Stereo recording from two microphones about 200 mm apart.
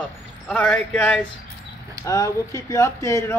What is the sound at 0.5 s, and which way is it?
Speech, 5° left (ahead or behind).